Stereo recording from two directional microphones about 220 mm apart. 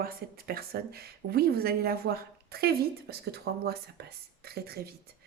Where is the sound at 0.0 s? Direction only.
40° right (ahead or behind).